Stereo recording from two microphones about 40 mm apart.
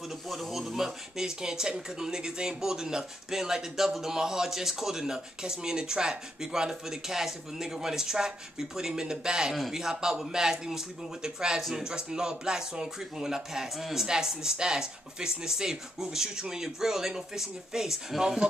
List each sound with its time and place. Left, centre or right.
0.3 s speech: centre